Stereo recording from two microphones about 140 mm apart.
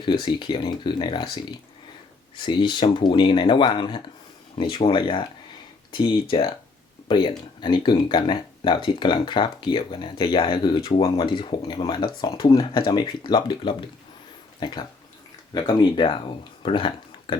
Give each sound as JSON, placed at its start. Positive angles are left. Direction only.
{"t": 0.0, "sound": "speech", "side_deg": 35}